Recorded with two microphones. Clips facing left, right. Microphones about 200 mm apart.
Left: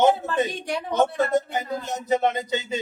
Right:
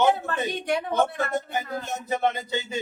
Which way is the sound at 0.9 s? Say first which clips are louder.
Left 7 dB; 20° left (ahead or behind).